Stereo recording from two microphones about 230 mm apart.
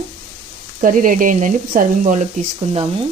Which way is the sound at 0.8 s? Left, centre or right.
Right.